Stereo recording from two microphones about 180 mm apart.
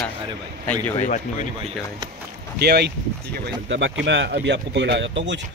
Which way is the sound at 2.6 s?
60° right (ahead or behind).